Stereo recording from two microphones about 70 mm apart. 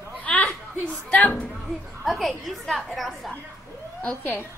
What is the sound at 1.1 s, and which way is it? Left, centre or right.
Speech, centre.